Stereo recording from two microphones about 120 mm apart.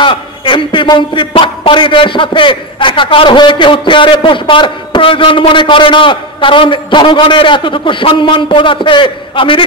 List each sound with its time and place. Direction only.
0.0 s a man's voice: 45° left (ahead or behind)